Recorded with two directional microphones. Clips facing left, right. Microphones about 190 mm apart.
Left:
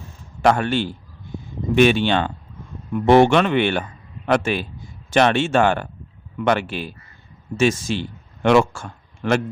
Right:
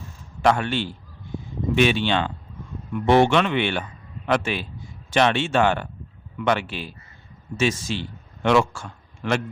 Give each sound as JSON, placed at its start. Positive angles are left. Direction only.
{"t": 0.4, "sound": "speech", "side_deg": 45}